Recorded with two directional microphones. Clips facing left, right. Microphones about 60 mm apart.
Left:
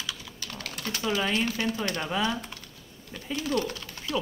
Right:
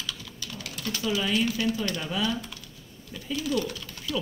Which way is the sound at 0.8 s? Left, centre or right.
Left.